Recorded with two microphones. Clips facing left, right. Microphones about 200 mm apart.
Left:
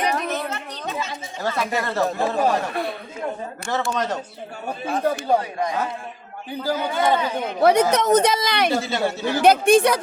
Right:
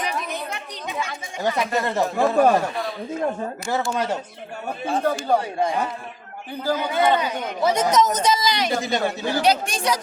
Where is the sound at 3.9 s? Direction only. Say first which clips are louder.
Even; 10° right (ahead or behind).